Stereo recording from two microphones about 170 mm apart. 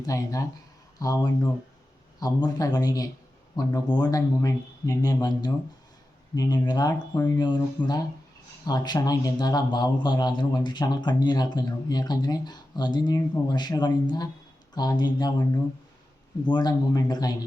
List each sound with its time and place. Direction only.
0.0 s a man's voice: 20° left (ahead or behind)